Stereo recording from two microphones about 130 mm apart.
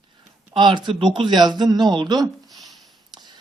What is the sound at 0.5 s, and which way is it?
Speech, 35° right (ahead or behind).